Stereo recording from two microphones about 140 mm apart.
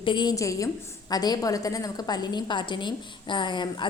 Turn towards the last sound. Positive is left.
turn(degrees=35)  # may be behind; listen again after turning